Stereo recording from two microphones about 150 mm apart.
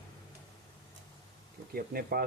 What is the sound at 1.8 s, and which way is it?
Speech, 90° right.